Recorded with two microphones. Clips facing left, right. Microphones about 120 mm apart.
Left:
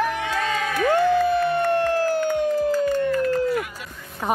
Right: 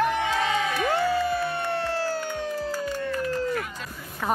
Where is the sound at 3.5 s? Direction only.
10° left (ahead or behind).